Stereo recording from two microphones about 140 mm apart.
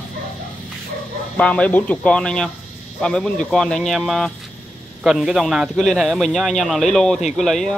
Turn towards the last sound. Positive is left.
turn(degrees=0)  # may be behind; listen again after turning